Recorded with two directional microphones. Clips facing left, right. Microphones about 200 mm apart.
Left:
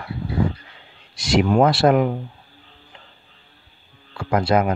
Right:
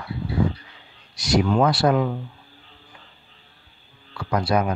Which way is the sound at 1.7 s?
25° left (ahead or behind).